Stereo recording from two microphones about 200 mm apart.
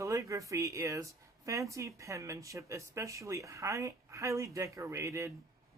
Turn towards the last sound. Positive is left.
turn(degrees=-15)  # may be behind; listen again after turning